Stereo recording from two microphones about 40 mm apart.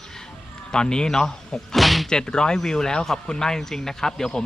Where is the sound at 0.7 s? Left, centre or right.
Centre.